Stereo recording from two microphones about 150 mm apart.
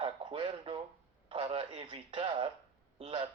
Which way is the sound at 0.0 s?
35° right (ahead or behind).